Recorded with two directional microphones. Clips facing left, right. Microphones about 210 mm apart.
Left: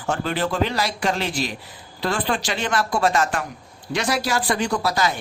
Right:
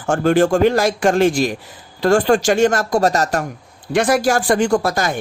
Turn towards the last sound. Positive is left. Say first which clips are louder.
# right 5 dB
turn(degrees=-50)  # may be behind; listen again after turning